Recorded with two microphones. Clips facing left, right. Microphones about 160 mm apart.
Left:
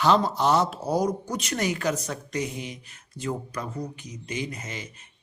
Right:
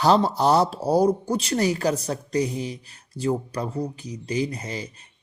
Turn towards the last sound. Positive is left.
turn(degrees=-35)  # may be behind; listen again after turning